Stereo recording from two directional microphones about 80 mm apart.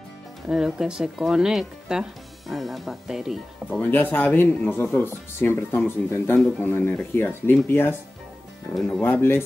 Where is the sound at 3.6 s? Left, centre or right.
Left.